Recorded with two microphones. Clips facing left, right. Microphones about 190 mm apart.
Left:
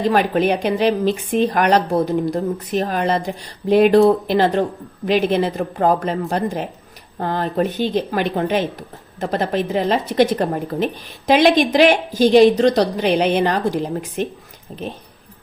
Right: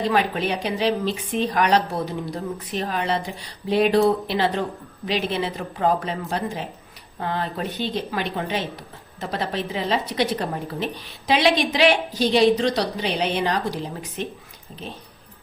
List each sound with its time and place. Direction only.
0.1 s speech: 50° left (ahead or behind)
14.7 s speech: 60° left (ahead or behind)